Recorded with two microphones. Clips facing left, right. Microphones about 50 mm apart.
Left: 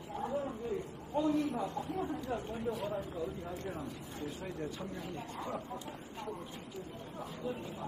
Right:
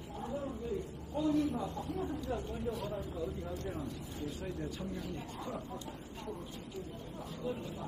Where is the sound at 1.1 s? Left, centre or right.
Left.